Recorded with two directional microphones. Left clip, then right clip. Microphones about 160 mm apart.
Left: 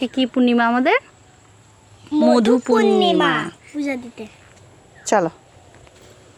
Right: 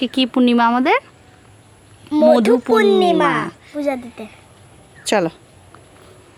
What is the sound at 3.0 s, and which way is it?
Speech, 20° right (ahead or behind).